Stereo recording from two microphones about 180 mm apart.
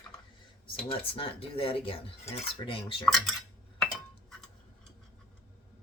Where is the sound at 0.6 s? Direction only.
30° left (ahead or behind).